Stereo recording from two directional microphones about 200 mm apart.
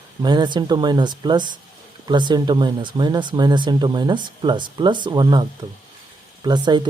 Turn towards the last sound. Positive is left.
turn(degrees=-20)  # may be behind; listen again after turning